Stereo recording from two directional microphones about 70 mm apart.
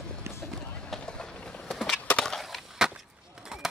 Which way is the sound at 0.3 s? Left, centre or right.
Right.